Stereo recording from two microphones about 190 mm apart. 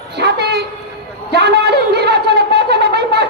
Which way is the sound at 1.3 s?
60° right (ahead or behind).